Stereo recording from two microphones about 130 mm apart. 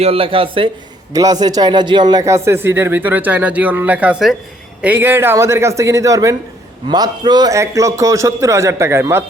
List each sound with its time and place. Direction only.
0.0 s speech: 45° right (ahead or behind)
1.1 s a man's voice: 30° right (ahead or behind)
2.2 s a man's voice: 20° right (ahead or behind)